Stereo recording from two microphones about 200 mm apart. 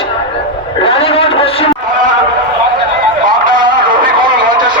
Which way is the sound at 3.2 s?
40° right (ahead or behind).